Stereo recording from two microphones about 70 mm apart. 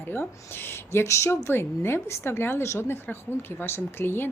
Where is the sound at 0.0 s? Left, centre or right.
Left.